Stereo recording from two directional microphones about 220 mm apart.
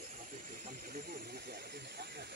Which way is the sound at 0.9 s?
45° right (ahead or behind).